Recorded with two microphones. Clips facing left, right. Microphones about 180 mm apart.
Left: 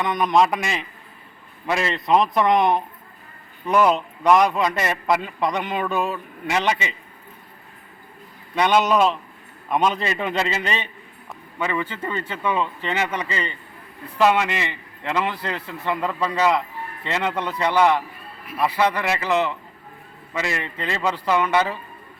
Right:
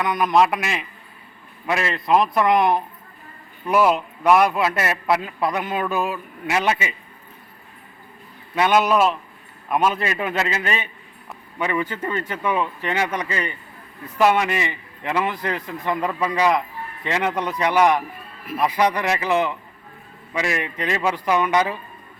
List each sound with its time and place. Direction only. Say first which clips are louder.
0.0 s a man's voice: right 1 dB; centre (ahead or behind)
8.5 s a man's voice: even; 5° right (ahead or behind)